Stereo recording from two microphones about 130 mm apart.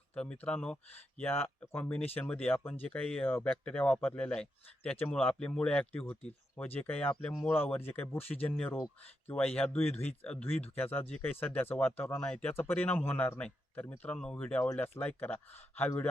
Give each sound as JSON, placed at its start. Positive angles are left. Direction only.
{"t": 0.1, "sound": "speech", "side_deg": 10}